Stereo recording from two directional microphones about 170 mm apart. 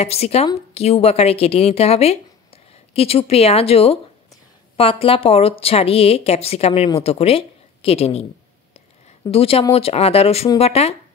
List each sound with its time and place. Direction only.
0.0 s a woman's voice: 35° left (ahead or behind)
9.3 s a woman's voice: 35° left (ahead or behind)